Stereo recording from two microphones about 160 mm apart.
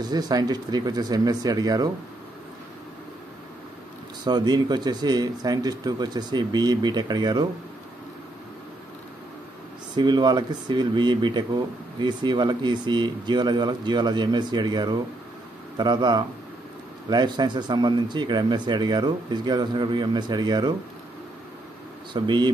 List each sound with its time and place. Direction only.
0.0 s speech: 25° right (ahead or behind)
4.2 s speech: 25° right (ahead or behind)
9.9 s speech: 25° right (ahead or behind)
22.1 s speech: 30° right (ahead or behind)